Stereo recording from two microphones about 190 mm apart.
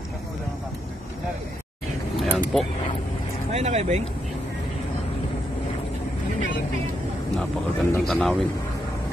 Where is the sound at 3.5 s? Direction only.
35° right (ahead or behind).